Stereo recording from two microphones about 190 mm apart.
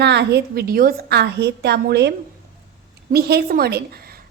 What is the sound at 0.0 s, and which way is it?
A woman's voice, 65° right (ahead or behind).